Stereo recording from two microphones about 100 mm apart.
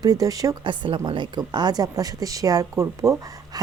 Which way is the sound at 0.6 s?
55° right (ahead or behind).